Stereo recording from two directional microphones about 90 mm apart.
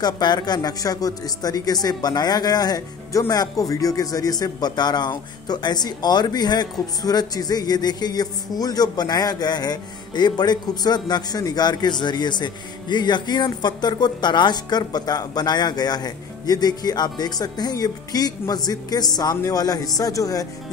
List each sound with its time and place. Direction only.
0.0 s speech: 50° left (ahead or behind)